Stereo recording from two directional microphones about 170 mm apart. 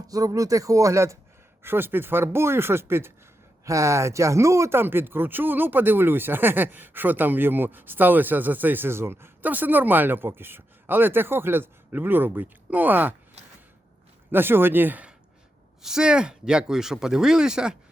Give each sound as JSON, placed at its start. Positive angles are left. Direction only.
{"t": 0.1, "sound": "speech", "side_deg": -20}
{"t": 14.3, "sound": "speech", "side_deg": -10}